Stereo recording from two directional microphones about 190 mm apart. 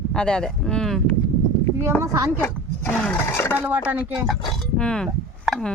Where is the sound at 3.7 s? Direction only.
10° right (ahead or behind).